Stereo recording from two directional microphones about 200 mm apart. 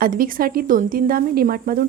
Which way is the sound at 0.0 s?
45° right (ahead or behind).